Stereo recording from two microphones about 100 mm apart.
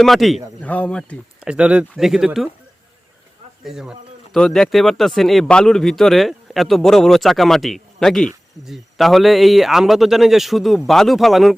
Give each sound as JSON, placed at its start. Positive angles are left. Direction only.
{"t": 0.0, "sound": "speech", "side_deg": 0}
{"t": 0.6, "sound": "speech", "side_deg": 15}
{"t": 1.4, "sound": "speech", "side_deg": -10}
{"t": 3.6, "sound": "a sound", "side_deg": -5}
{"t": 4.4, "sound": "speech", "side_deg": 5}